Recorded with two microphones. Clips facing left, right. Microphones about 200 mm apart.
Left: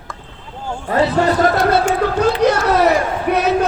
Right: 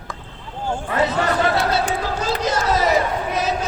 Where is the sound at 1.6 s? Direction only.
55° left (ahead or behind).